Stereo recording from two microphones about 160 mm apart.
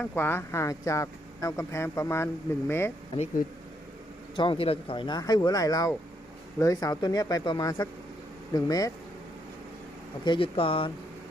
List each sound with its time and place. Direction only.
0.0 s speech: 10° left (ahead or behind)
4.4 s speech: 35° left (ahead or behind)
10.2 s speech: 35° left (ahead or behind)